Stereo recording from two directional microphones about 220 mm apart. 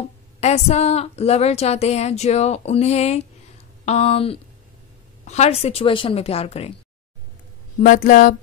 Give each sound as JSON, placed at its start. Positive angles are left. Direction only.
{"t": 0.0, "sound": "speech", "side_deg": 30}
{"t": 7.8, "sound": "speech", "side_deg": 35}